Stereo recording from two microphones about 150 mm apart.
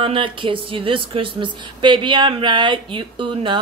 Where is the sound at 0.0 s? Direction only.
35° right (ahead or behind).